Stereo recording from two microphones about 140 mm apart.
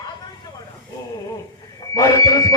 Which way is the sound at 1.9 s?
25° left (ahead or behind).